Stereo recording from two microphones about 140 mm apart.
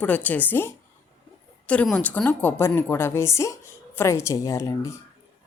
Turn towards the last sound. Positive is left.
turn(degrees=25)  # may be behind; listen again after turning